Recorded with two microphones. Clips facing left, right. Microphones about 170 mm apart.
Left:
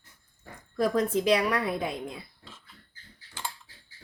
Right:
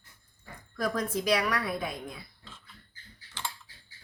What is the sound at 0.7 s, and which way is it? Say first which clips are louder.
Speech: left 5 dB; 30° left (ahead or behind).